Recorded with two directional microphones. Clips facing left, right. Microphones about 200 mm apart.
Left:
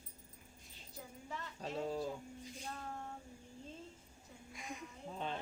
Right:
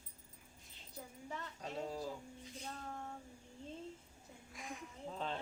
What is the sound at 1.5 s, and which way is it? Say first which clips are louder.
Speech: left 4 dB; 25° left (ahead or behind).